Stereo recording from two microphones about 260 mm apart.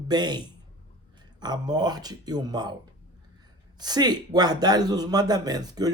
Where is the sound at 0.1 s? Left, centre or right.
Centre.